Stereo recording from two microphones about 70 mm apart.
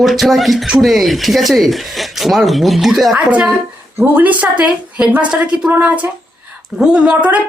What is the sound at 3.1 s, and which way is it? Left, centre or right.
A woman's voice, right.